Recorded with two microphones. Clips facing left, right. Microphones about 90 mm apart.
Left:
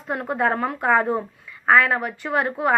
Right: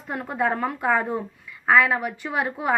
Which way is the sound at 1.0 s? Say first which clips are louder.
Left 4 dB; 50° left (ahead or behind).